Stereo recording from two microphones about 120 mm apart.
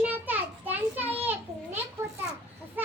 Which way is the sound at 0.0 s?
15° right (ahead or behind).